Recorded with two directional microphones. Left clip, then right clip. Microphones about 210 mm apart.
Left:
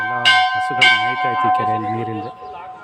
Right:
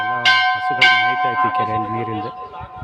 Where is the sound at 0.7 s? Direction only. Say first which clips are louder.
Left 1 dB; 55° left (ahead or behind).